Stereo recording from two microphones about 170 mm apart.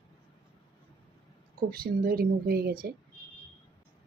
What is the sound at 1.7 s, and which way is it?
Speech, 60° right (ahead or behind).